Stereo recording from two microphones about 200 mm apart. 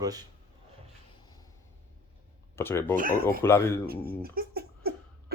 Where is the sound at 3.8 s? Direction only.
50° right (ahead or behind).